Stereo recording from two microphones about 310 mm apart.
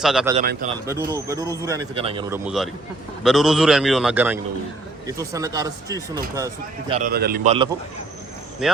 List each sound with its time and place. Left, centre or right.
0.0 s a man's voice: centre
0.3 s a man's voice: right
0.9 s speech: centre
3.2 s a man's voice: centre
7.1 s a man's voice: right
8.6 s speech: centre